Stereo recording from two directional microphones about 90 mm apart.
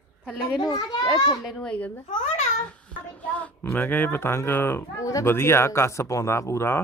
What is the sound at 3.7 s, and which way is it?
Speech, 20° left (ahead or behind).